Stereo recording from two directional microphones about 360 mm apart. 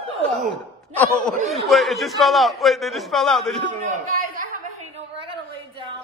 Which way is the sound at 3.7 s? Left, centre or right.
Right.